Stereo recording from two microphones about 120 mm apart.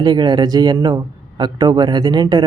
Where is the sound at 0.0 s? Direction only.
35° right (ahead or behind).